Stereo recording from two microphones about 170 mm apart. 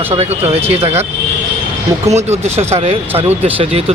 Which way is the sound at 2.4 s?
40° right (ahead or behind).